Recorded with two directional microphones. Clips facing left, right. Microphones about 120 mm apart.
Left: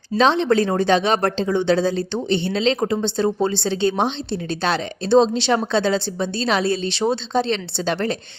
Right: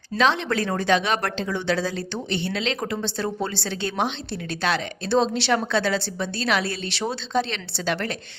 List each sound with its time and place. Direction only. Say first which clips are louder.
0.2 s a woman's voice: left 5 dB; 30° left (ahead or behind)